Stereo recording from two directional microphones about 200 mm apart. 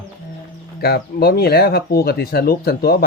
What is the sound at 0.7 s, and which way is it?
Speech, 50° left (ahead or behind).